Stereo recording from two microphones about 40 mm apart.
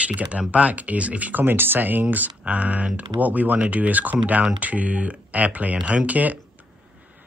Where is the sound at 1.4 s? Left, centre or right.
Right.